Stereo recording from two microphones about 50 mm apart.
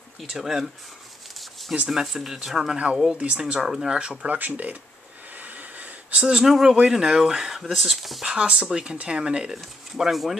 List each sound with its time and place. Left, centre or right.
0.2 s speech: centre
1.4 s a sound: centre
1.9 s speech: centre
3.2 s speech: right
3.5 s speech: centre
4.0 s speech: centre
4.3 s speech: right
5.3 s wheeze: right
6.1 s speech: centre
8.3 s speech: right